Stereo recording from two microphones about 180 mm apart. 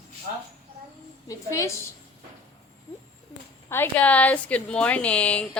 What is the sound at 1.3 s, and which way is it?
Speech, 15° left (ahead or behind).